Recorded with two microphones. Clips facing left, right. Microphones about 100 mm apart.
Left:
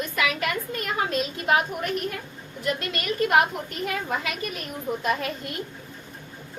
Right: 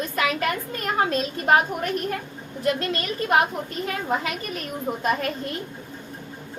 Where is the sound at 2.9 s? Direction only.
30° right (ahead or behind).